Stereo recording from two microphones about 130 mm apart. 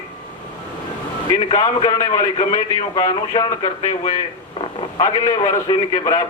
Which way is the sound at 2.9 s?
35° left (ahead or behind).